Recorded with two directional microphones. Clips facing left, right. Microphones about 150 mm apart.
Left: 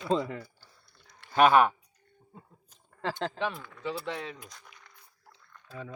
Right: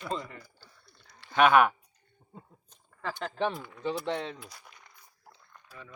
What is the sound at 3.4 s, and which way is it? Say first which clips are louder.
Speech: right 3 dB; 30° right (ahead or behind).